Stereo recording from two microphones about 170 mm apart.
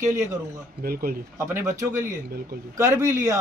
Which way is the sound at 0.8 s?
60° right (ahead or behind).